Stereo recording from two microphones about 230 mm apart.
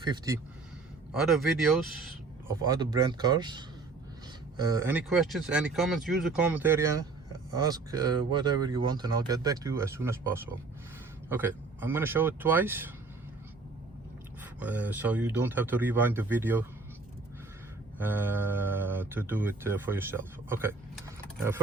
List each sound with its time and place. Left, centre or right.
0.0 s speech: centre
1.1 s speech: centre
2.5 s speech: centre
14.6 s speech: centre
18.0 s speech: centre